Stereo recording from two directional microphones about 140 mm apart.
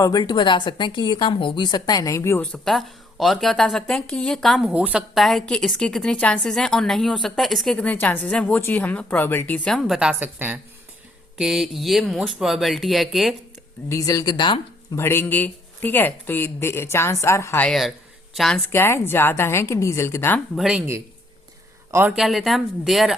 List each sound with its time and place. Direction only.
0.0 s a woman's voice: 30° left (ahead or behind)
2.4 s a woman's voice: 5° left (ahead or behind)
4.7 s a woman's voice: 10° right (ahead or behind); by 9.7 s 15° left (ahead or behind)
9.7 s a woman's voice: 5° right (ahead or behind)
11.3 s a woman's voice: 5° right (ahead or behind)
13.8 s speech: 25° left (ahead or behind)
14.9 s speech: 15° left (ahead or behind)
17.7 s a woman's voice: centre (ahead or behind)
18.7 s speech: 15° left (ahead or behind)
20.6 s speech: 5° right (ahead or behind)
22.1 s a woman's voice: centre (ahead or behind)